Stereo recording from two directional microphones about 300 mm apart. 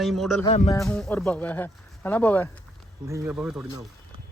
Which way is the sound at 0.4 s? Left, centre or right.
Centre.